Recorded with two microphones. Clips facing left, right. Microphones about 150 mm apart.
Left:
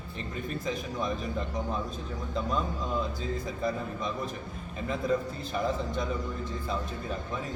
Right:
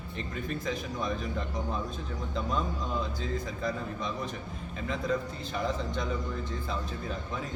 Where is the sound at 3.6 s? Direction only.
Centre (ahead or behind).